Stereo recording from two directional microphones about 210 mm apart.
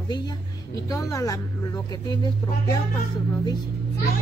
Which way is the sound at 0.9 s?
15° left (ahead or behind).